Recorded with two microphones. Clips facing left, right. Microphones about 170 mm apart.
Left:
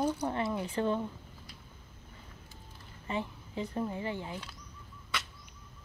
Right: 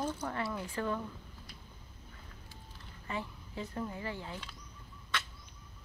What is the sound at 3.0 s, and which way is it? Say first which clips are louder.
Speech: left 4 dB; 20° left (ahead or behind).